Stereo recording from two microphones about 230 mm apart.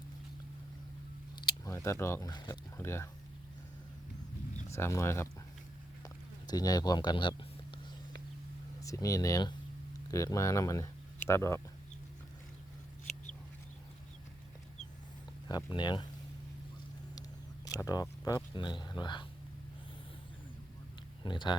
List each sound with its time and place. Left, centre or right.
1.4 s speech: centre
4.7 s speech: centre
6.5 s speech: centre
8.8 s speech: centre
15.4 s speech: centre
17.7 s speech: centre
21.2 s speech: centre